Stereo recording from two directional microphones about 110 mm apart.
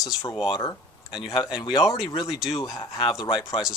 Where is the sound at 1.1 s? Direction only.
45° left (ahead or behind).